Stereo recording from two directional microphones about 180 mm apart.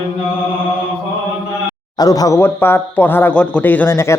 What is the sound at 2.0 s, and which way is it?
Speech, 20° left (ahead or behind).